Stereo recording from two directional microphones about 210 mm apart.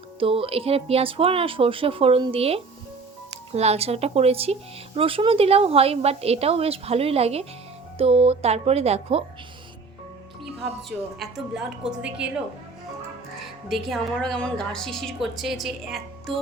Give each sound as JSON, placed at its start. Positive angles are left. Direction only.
{"t": 0.2, "sound": "a woman's voice", "side_deg": -25}
{"t": 10.8, "sound": "a woman's voice", "side_deg": 0}
{"t": 13.7, "sound": "a woman's voice", "side_deg": 0}